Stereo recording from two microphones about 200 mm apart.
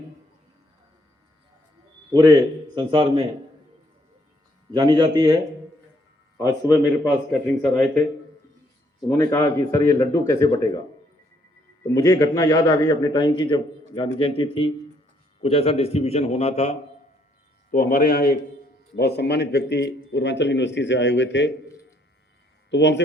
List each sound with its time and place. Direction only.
2.1 s speech: 20° right (ahead or behind)
4.7 s speech: 20° right (ahead or behind)
7.3 s speech: 5° left (ahead or behind)
9.0 s speech: 15° left (ahead or behind)
11.9 s a man's voice: 15° left (ahead or behind); by 16.7 s 35° left (ahead or behind)
17.7 s a man's voice: 45° left (ahead or behind); by 21.5 s 60° left (ahead or behind)
22.7 s speech: 65° left (ahead or behind)